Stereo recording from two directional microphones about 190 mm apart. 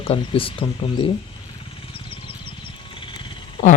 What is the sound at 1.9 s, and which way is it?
Wild animals, 30° left (ahead or behind).